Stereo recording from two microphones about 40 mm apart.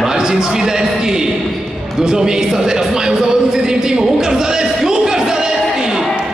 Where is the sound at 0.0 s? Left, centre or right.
Centre.